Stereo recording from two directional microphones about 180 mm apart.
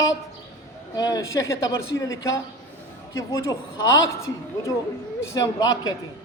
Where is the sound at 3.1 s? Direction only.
15° left (ahead or behind).